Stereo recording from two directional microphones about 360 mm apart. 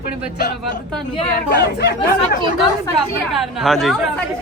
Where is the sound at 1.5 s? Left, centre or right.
Left.